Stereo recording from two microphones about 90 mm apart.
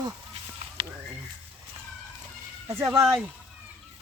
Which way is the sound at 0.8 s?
75° right (ahead or behind).